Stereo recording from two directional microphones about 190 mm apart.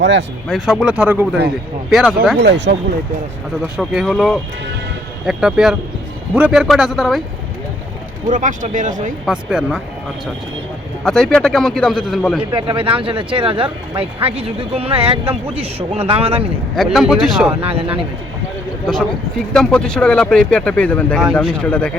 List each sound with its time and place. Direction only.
0.0 s speech: 70° right (ahead or behind)
0.4 s speech: centre (ahead or behind)
2.4 s speech: 65° right (ahead or behind)
3.8 s speech: centre (ahead or behind)
8.3 s speech: 40° right (ahead or behind)
9.2 s speech: 5° right (ahead or behind)
11.0 s speech: 5° left (ahead or behind)
12.5 s speech: 25° right (ahead or behind)
16.7 s speech: centre (ahead or behind)
17.5 s speech: 30° right (ahead or behind)
19.5 s speech: 5° left (ahead or behind)